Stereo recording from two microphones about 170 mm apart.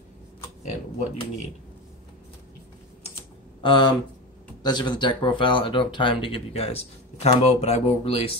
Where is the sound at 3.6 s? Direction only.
30° left (ahead or behind).